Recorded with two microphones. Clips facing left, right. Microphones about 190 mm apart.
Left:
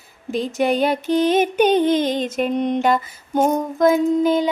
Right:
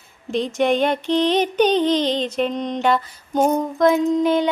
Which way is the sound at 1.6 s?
50° left (ahead or behind).